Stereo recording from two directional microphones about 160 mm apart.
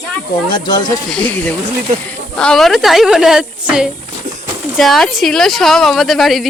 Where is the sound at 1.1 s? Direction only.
5° left (ahead or behind).